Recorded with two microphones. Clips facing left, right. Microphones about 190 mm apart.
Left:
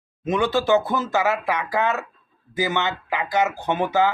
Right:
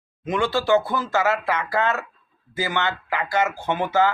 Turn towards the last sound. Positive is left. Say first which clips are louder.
# even
turn(degrees=15)  # may be behind; listen again after turning